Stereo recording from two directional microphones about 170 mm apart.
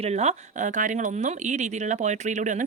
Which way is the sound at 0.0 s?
40° right (ahead or behind).